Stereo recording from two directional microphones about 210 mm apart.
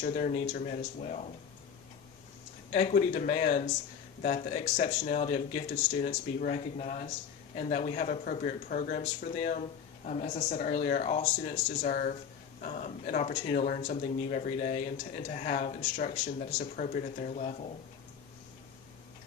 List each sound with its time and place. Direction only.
0.0 s speech: 40° left (ahead or behind)
2.7 s speech: 30° left (ahead or behind)